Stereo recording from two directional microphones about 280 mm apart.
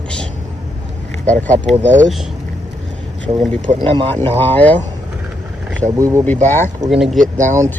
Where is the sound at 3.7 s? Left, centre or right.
Centre.